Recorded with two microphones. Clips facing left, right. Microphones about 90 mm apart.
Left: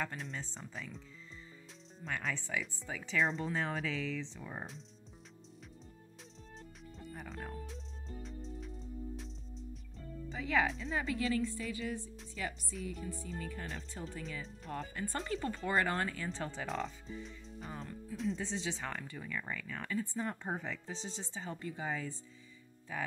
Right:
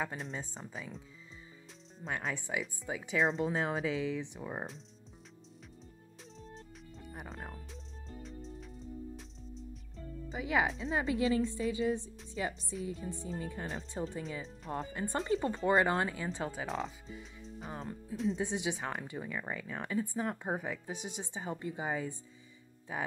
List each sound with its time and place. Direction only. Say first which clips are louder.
0.0 s speech: right 2 dB; 5° right (ahead or behind)
2.0 s a woman's voice: right 2 dB; 25° right (ahead or behind)
2.3 s speech: right 2 dB; 15° right (ahead or behind)
3.2 s speech: right 3 dB; 5° right (ahead or behind)
3.4 s speech: right 4 dB; 15° right (ahead or behind)
10.3 s a woman's voice: right 1 dB; 15° right (ahead or behind); by 18.4 s centre (ahead or behind)
18.4 s speech: right 4 dB; 15° right (ahead or behind)